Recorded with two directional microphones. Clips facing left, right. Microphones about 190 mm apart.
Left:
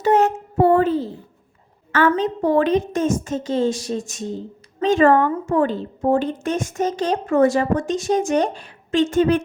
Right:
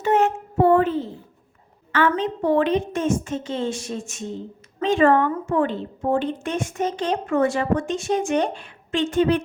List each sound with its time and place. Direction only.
0.0 s child singing: 40° left (ahead or behind)
1.9 s a woman's voice: 40° left (ahead or behind)